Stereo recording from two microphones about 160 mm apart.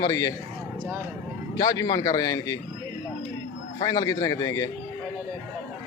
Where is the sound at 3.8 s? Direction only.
20° left (ahead or behind).